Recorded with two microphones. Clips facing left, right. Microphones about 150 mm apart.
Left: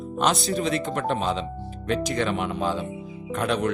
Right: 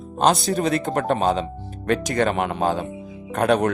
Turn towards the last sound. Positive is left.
turn(degrees=-50)  # may be behind; listen again after turning